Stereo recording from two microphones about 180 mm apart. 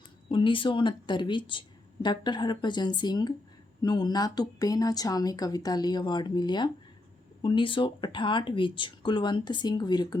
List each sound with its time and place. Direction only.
0.3 s speech: 30° left (ahead or behind)